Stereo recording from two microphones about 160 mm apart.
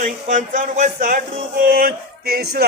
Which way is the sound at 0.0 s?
55° right (ahead or behind).